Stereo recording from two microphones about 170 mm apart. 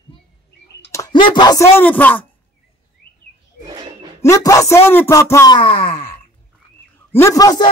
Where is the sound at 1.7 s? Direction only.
10° left (ahead or behind).